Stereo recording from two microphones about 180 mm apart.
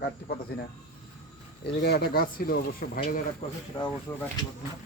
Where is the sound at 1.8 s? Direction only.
65° left (ahead or behind).